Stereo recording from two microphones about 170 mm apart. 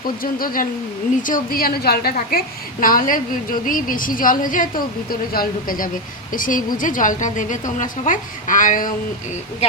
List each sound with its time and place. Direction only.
0.2 s a woman's voice: 55° left (ahead or behind)